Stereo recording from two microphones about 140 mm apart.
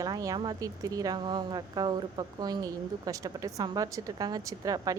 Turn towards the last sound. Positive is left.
turn(degrees=-25)  # may be behind; listen again after turning